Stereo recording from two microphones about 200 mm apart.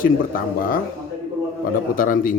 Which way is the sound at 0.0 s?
45° left (ahead or behind).